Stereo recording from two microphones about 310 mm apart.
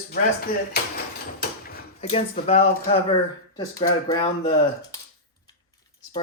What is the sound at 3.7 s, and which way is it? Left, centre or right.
Speech, centre.